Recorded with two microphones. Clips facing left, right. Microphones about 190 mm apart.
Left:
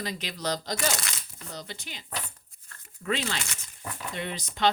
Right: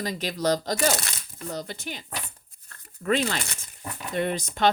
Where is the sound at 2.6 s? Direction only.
50° right (ahead or behind).